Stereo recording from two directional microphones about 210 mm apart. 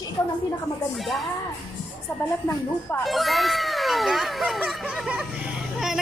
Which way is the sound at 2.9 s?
Centre (ahead or behind).